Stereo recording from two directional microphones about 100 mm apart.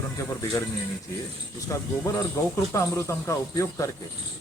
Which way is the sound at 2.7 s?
30° left (ahead or behind).